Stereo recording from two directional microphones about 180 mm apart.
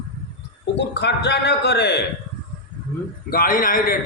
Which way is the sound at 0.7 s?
70° left (ahead or behind).